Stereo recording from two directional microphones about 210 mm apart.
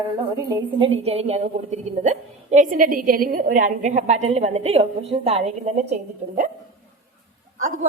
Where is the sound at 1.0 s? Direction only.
30° right (ahead or behind).